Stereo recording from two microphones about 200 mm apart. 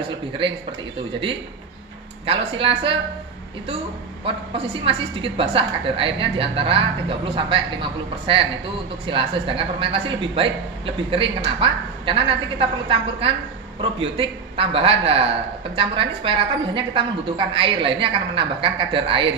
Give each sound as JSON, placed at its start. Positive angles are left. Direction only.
{"t": 2.2, "sound": "a woman's voice", "side_deg": -30}
{"t": 4.2, "sound": "a woman's voice", "side_deg": -30}